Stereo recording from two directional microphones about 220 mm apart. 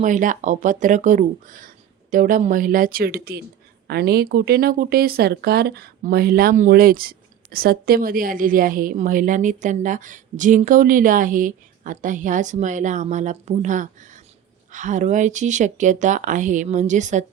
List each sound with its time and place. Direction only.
0.0 s speech: 35° right (ahead or behind)